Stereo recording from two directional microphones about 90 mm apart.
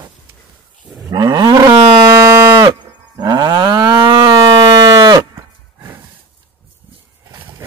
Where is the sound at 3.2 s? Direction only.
50° right (ahead or behind).